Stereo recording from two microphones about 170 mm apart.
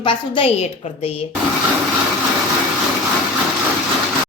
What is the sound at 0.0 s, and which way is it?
A woman's voice, 30° left (ahead or behind).